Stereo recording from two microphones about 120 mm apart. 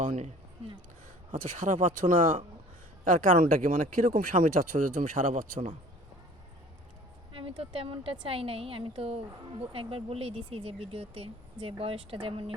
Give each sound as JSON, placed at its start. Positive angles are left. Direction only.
{"t": 0.0, "sound": "speech", "side_deg": -90}
{"t": 1.3, "sound": "speech", "side_deg": -90}
{"t": 7.3, "sound": "speech", "side_deg": -50}